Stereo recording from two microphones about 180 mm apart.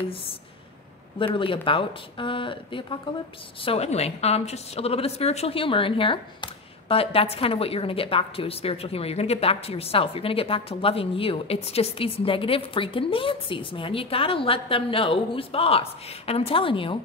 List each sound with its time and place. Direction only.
0.1 s a woman's voice: 30° left (ahead or behind)